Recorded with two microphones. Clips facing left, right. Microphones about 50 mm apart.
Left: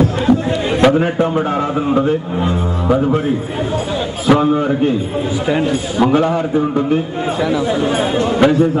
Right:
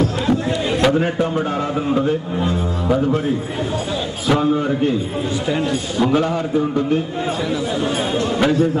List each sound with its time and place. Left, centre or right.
0.3 s a sound: centre
1.2 s speech: left
4.3 s speech: centre